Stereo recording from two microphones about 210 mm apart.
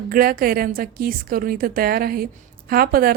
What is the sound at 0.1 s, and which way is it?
A woman's voice, 45° right (ahead or behind).